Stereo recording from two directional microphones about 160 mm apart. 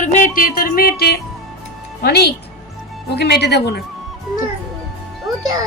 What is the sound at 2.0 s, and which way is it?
Speech, 90° left.